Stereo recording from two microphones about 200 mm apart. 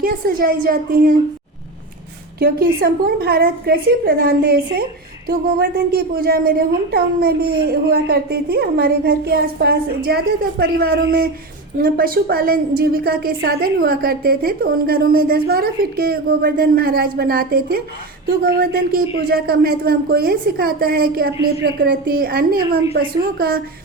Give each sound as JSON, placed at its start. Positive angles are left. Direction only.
{"t": 0.0, "sound": "a woman's voice", "side_deg": -45}
{"t": 2.4, "sound": "a woman's voice", "side_deg": -50}